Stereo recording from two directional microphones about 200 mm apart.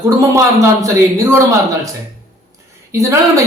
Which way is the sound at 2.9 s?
15° right (ahead or behind).